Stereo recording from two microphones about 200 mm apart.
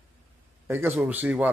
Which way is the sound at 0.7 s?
10° right (ahead or behind).